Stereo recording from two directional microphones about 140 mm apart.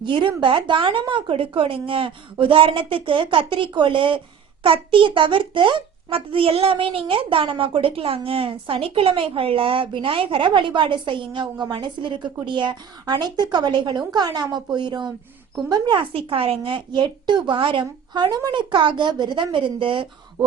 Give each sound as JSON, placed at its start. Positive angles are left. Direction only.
{"t": 0.0, "sound": "a child's voice", "side_deg": -35}